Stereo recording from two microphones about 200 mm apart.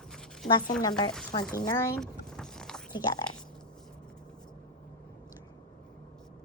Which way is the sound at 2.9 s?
20° left (ahead or behind).